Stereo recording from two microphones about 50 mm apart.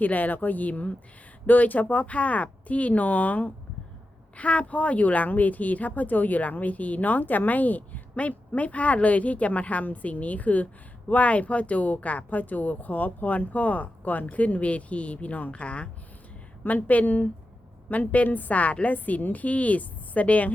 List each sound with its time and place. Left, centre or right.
0.0 s speech: left